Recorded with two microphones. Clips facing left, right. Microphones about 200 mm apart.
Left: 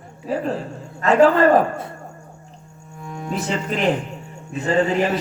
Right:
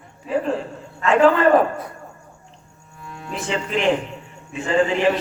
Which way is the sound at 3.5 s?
40° left (ahead or behind).